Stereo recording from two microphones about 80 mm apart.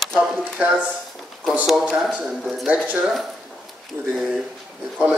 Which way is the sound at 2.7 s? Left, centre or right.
Right.